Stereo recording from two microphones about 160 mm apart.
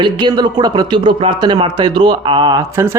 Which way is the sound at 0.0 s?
30° right (ahead or behind).